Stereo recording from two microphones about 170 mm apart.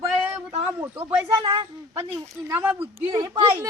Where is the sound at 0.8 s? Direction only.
10° right (ahead or behind).